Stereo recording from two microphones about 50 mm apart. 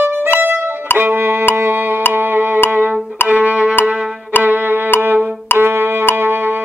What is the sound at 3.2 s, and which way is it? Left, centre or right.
Music, right.